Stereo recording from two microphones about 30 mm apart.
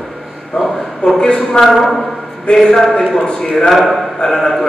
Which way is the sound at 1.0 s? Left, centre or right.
Left.